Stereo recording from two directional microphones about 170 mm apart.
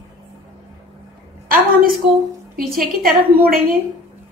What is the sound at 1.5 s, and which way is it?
Speech, 60° right (ahead or behind).